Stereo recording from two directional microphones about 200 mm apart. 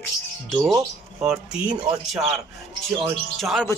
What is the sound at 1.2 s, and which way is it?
Speech, 5° right (ahead or behind).